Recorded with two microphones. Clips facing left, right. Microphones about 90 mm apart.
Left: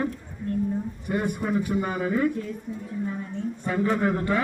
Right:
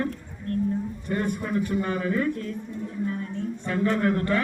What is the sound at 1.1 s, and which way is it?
A man's voice, 10° left (ahead or behind).